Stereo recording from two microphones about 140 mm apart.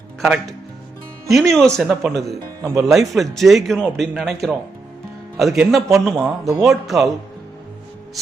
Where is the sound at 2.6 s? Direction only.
25° right (ahead or behind).